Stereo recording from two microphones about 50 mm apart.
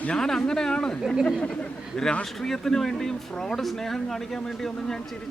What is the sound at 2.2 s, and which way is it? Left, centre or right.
Speech, centre.